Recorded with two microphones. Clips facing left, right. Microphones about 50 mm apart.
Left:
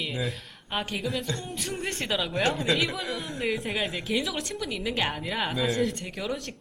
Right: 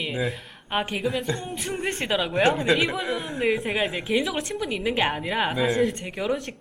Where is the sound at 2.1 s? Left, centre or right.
Centre.